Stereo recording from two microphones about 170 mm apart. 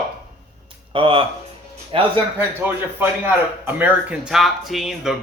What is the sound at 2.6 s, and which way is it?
A man's voice, 10° right (ahead or behind).